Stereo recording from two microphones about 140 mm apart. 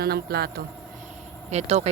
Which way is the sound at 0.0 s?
90° right.